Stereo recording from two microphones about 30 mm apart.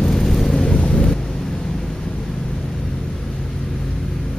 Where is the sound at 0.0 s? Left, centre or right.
Centre.